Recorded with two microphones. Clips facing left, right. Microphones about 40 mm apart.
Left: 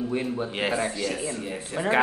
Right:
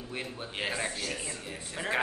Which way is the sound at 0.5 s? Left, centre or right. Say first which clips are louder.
Left 7 dB; left.